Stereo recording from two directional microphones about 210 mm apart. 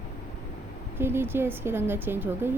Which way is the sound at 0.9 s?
10° right (ahead or behind).